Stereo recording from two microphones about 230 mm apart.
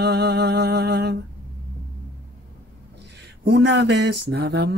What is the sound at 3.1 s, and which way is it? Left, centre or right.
Speech, right.